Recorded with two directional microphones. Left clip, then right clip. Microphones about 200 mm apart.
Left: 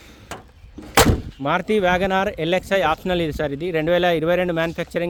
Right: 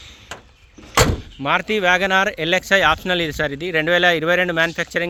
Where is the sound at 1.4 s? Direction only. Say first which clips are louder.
Right 2 dB; 15° left (ahead or behind).